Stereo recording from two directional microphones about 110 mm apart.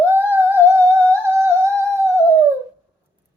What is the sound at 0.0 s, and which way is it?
Music, 20° right (ahead or behind).